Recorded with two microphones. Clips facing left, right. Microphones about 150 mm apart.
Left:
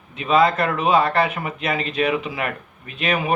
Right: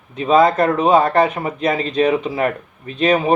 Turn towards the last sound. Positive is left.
turn(degrees=-35)  # may be behind; listen again after turning